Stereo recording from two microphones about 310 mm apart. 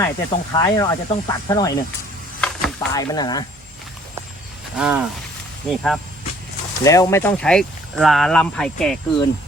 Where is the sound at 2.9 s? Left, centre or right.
Centre.